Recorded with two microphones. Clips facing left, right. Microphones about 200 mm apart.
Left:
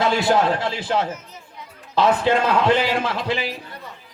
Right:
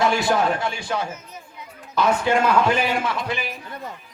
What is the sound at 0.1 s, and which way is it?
A man's voice, 25° left (ahead or behind).